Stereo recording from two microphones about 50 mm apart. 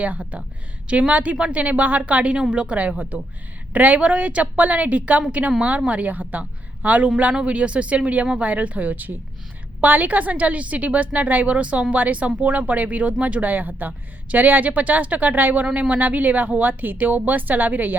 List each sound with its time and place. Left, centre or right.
0.0 s speech: right